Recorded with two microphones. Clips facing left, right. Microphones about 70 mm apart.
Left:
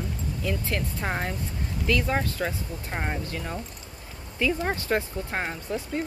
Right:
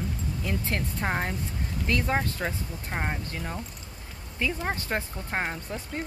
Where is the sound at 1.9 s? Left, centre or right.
Right.